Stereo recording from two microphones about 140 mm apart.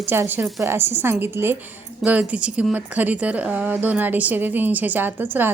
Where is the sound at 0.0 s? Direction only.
15° right (ahead or behind).